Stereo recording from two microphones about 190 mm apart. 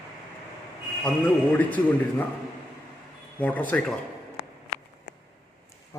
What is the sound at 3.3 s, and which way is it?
Speech, 10° left (ahead or behind).